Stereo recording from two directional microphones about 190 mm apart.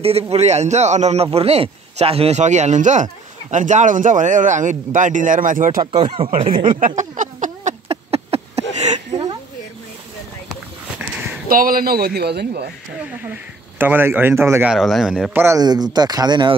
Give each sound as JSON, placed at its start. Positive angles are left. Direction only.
{"t": 0.0, "sound": "a man's voice", "side_deg": -30}
{"t": 5.8, "sound": "speech", "side_deg": -30}
{"t": 6.7, "sound": "a sound", "side_deg": -45}
{"t": 11.4, "sound": "a man's voice", "side_deg": -50}
{"t": 13.2, "sound": "speech", "side_deg": -10}
{"t": 14.7, "sound": "speech", "side_deg": 0}
{"t": 15.4, "sound": "speech", "side_deg": -20}